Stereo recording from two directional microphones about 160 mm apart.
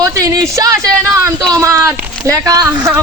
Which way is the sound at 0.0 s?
20° right (ahead or behind).